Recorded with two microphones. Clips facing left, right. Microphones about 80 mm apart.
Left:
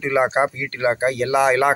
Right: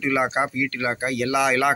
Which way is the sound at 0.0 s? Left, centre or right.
Left.